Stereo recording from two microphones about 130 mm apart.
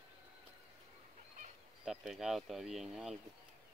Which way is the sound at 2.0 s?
Centre (ahead or behind).